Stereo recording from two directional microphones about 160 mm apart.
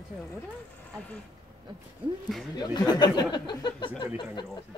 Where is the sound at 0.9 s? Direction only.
5° left (ahead or behind).